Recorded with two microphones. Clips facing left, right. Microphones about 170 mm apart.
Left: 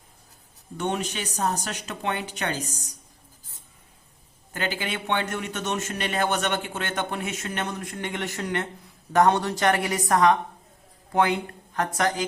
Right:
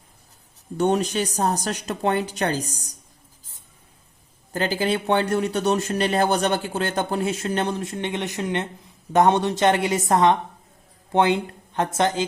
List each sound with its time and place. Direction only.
0.8 s speech: 40° right (ahead or behind)
4.5 s a woman's voice: 35° right (ahead or behind)